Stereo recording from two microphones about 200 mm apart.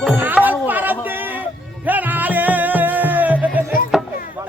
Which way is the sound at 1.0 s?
10° right (ahead or behind).